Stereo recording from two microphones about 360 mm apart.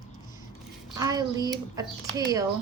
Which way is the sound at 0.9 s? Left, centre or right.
Centre.